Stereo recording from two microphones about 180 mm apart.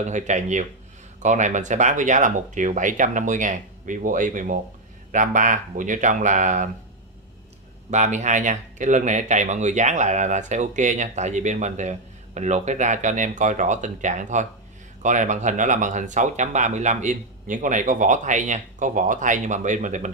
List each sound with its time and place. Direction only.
0.0 s speech: 40° right (ahead or behind)
7.9 s speech: 40° right (ahead or behind)